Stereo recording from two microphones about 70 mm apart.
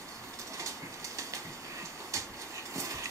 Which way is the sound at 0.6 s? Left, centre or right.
Right.